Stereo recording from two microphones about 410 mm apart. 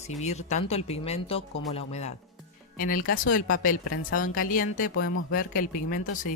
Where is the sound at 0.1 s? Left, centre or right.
Centre.